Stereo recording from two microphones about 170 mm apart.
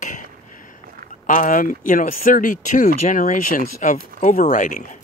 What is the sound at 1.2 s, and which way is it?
Speech, 50° left (ahead or behind).